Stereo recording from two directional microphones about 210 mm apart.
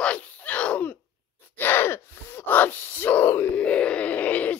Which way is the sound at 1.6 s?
10° left (ahead or behind).